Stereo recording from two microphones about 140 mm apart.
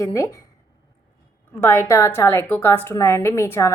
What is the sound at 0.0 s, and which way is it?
Speech, 20° left (ahead or behind).